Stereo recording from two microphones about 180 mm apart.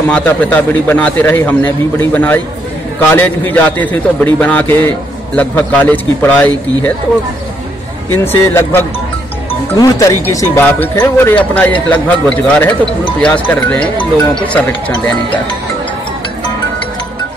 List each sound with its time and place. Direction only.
0.1 s speech: 5° left (ahead or behind)
8.1 s speech: 15° left (ahead or behind)